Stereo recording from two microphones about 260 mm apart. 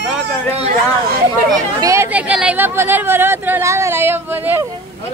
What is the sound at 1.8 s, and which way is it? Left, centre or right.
Speech, centre.